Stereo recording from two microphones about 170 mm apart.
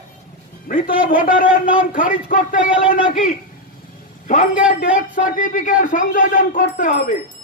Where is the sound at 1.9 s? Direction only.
50° left (ahead or behind).